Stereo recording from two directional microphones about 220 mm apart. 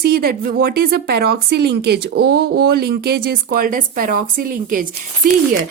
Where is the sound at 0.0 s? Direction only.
45° right (ahead or behind).